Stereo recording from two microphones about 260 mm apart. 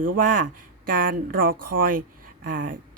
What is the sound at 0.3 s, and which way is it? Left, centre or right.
Speech, right.